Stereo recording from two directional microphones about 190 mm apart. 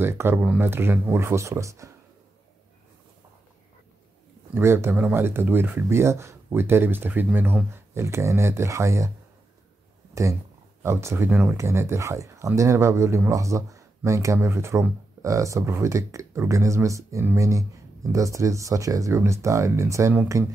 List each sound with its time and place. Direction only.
0.0 s speech: 10° right (ahead or behind)
4.6 s speech: 15° right (ahead or behind)
10.8 s speech: 15° right (ahead or behind)